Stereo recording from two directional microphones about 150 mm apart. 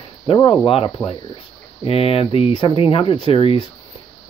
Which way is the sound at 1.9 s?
40° left (ahead or behind).